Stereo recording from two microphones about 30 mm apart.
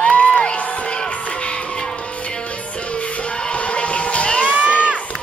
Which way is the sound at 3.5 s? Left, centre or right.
Left.